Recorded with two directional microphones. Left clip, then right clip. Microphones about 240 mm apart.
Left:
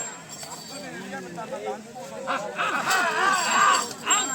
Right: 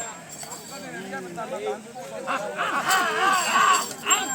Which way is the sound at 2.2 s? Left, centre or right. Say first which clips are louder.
Even; centre.